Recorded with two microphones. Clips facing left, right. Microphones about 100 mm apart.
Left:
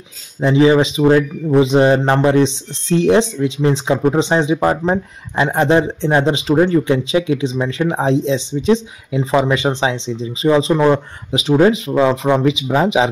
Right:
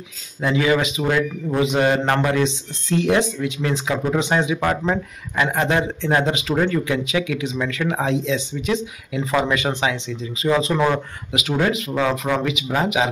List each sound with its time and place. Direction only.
0.4 s speech: 25° left (ahead or behind)